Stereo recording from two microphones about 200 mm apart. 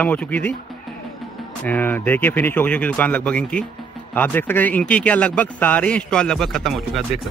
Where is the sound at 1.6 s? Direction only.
10° left (ahead or behind).